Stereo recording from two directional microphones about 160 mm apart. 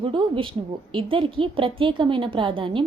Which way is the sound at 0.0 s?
30° right (ahead or behind).